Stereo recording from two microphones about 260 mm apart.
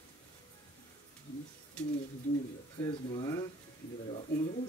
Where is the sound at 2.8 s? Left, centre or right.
Centre.